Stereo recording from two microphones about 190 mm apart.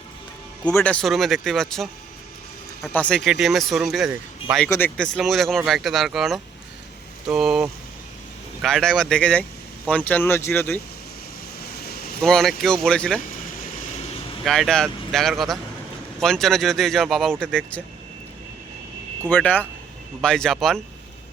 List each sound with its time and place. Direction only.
0.6 s speech: 5° left (ahead or behind)
2.9 s speech: 5° left (ahead or behind)
4.6 s speech: 10° left (ahead or behind)
11.8 s vehicle: 55° left (ahead or behind)
12.2 s speech: centre (ahead or behind)
14.4 s speech: centre (ahead or behind)
19.2 s speech: 10° left (ahead or behind)